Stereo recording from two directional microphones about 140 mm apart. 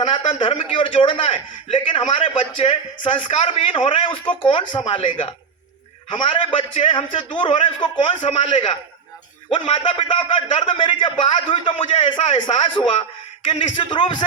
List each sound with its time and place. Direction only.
0.0 s a man's voice: 35° left (ahead or behind)